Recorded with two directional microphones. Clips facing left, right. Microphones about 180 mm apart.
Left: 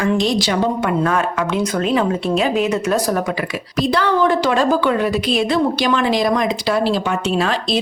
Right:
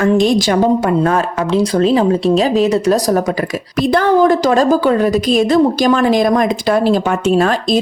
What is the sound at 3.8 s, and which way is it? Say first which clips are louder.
A woman's voice: right 5 dB; 50° right (ahead or behind).